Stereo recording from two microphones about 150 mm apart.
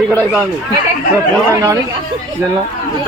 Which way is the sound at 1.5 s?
20° right (ahead or behind).